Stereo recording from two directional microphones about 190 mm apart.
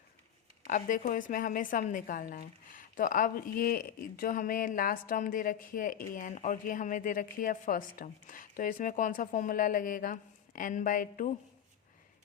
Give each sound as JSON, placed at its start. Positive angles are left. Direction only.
{"t": 0.7, "sound": "a woman's voice", "side_deg": 45}